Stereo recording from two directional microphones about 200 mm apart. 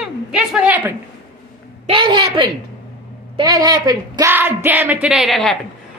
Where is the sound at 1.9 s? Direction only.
25° right (ahead or behind).